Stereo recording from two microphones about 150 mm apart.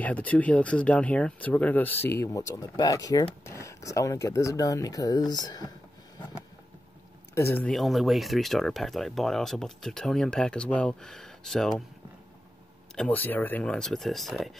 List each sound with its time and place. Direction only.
0.0 s speech: 10° left (ahead or behind); by 5.7 s 30° left (ahead or behind)
7.3 s speech: 15° left (ahead or behind)
7.7 s speech: centre (ahead or behind)
12.9 s speech: 10° left (ahead or behind)